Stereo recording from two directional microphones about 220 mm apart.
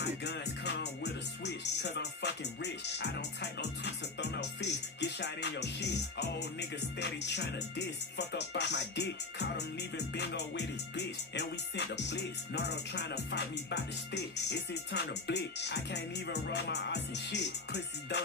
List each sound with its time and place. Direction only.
0.0 s music: 50° left (ahead or behind)